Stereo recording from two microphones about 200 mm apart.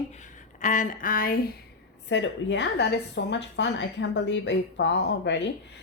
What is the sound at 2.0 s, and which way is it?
A woman's voice, 65° left (ahead or behind).